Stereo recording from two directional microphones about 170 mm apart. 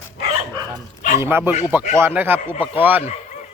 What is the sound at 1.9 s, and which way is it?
Speech, 15° right (ahead or behind).